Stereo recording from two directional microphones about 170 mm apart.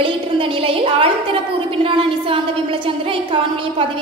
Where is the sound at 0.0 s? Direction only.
30° right (ahead or behind).